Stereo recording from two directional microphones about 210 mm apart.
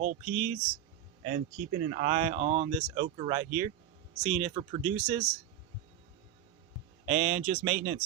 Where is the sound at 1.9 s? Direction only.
35° right (ahead or behind).